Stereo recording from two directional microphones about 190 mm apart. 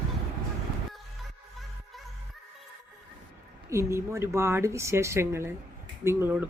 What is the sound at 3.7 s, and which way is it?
Speech, 15° right (ahead or behind).